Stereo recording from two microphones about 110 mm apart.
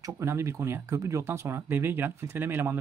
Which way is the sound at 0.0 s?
25° right (ahead or behind).